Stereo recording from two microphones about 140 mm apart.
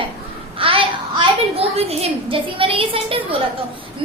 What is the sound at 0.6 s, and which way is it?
A woman's voice, 40° right (ahead or behind).